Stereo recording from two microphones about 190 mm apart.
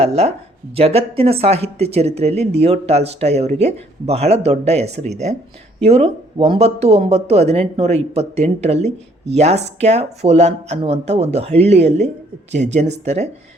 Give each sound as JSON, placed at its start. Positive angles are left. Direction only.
{"t": 0.0, "sound": "speech", "side_deg": -35}